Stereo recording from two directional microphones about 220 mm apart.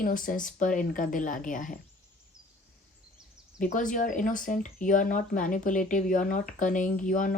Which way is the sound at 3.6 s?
35° left (ahead or behind).